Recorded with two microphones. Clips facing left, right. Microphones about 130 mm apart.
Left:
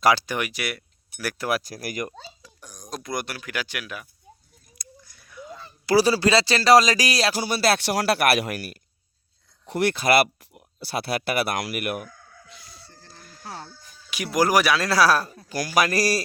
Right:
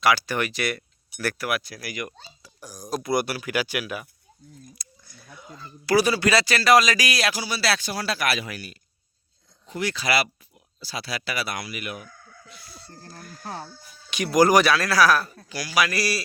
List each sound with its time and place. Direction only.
0.2 s speech: 15° left (ahead or behind)
1.4 s speech: 30° left (ahead or behind)
2.4 s speech: 5° right (ahead or behind)
4.7 s a sound: 30° right (ahead or behind)
5.8 s speech: 30° left (ahead or behind)
7.4 s a man's voice: 50° left (ahead or behind)
7.9 s speech: 70° left (ahead or behind)
9.6 s speech: 65° left (ahead or behind)
12.5 s chicken: 20° left (ahead or behind)
12.9 s speech: 50° right (ahead or behind)
13.4 s chicken: 20° right (ahead or behind)
14.1 s speech: 5° left (ahead or behind)
14.8 s speech: 25° left (ahead or behind)
15.4 s a man's voice: 45° left (ahead or behind)